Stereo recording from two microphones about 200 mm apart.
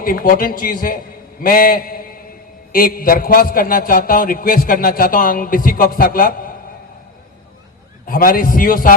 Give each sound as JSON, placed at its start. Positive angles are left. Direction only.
{"t": 0.0, "sound": "a man's voice", "side_deg": 45}
{"t": 8.0, "sound": "a man's voice", "side_deg": 45}